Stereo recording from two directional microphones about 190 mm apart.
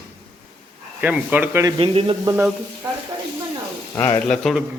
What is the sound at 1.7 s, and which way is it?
Speech, 30° right (ahead or behind).